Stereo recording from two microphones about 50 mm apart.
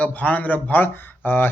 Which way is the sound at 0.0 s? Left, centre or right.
Left.